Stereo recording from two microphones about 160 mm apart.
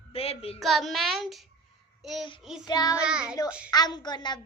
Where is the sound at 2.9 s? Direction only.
5° right (ahead or behind).